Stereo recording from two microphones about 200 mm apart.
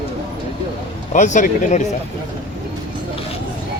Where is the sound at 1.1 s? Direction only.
35° left (ahead or behind).